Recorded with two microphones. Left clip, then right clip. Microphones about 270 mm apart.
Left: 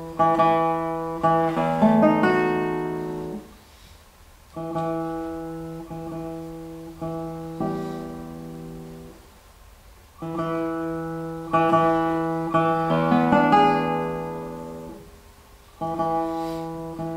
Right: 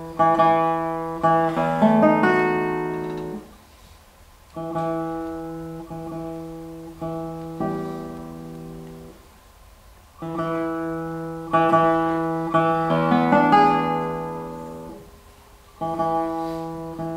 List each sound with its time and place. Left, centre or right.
0.2 s music: centre
4.6 s guitar: centre
7.0 s music: centre
10.2 s music: centre
11.5 s music: centre
15.8 s music: centre